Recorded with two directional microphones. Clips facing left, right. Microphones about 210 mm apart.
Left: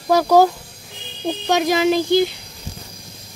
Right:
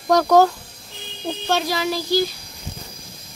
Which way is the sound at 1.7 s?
20° left (ahead or behind).